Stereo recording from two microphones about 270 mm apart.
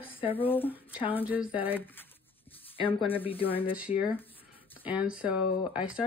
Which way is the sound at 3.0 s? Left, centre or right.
Centre.